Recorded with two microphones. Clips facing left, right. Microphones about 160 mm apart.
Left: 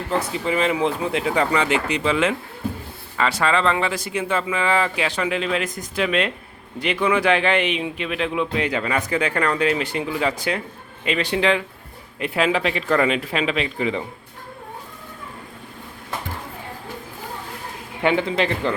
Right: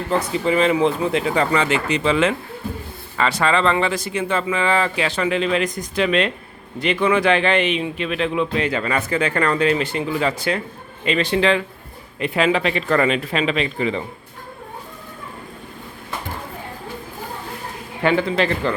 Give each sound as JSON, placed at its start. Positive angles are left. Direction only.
{"t": 0.2, "sound": "speech", "side_deg": 5}
{"t": 18.0, "sound": "speech", "side_deg": 20}